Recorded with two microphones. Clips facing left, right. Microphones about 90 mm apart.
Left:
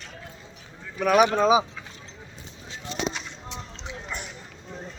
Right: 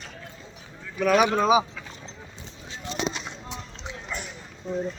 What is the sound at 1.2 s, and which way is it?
Speech, 5° right (ahead or behind).